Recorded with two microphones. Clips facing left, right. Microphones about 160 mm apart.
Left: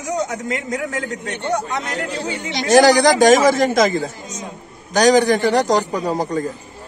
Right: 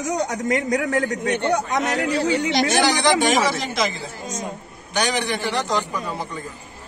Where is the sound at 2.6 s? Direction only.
40° left (ahead or behind).